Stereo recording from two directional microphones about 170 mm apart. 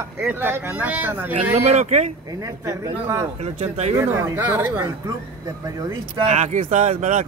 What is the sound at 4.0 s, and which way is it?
Speech, 15° right (ahead or behind).